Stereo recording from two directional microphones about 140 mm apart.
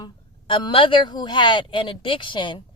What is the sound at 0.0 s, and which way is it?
Speech, 35° left (ahead or behind).